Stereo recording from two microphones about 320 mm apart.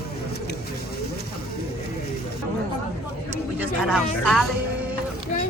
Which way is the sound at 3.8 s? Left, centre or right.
Centre.